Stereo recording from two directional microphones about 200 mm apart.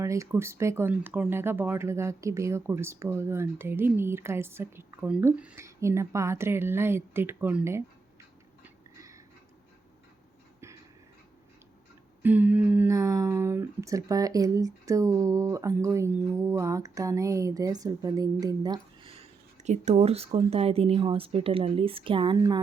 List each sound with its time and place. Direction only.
0.0 s speech: 15° right (ahead or behind)
8.6 s a sound: 15° right (ahead or behind)
12.2 s speech: 10° right (ahead or behind)
19.6 s speech: 35° right (ahead or behind)